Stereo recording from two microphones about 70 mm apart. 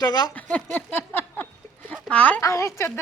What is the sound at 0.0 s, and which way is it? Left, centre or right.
Speech, left.